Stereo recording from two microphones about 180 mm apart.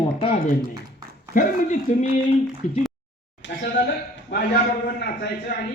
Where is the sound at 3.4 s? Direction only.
80° left.